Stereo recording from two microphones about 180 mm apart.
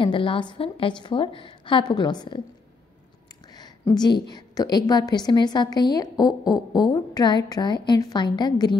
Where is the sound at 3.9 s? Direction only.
25° left (ahead or behind).